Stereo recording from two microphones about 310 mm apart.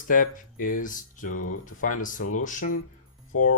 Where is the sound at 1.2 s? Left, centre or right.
Left.